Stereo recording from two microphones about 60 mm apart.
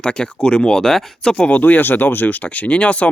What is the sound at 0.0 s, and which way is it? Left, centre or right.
Speech, centre.